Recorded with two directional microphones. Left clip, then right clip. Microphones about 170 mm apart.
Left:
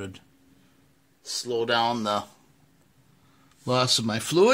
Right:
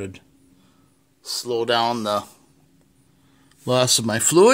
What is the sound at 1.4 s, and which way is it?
Speech, 15° right (ahead or behind).